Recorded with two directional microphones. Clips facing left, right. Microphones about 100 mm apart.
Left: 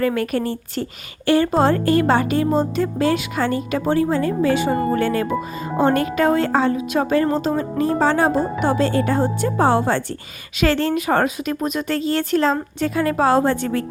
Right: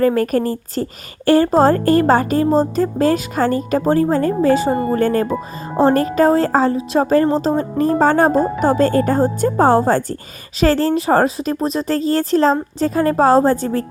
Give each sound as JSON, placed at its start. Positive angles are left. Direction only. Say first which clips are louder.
{"t": 0.0, "sound": "a woman's voice", "louder": "right 5 dB", "side_deg": -40}